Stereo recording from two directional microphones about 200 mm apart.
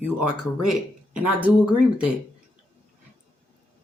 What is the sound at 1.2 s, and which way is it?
Speech, 5° right (ahead or behind).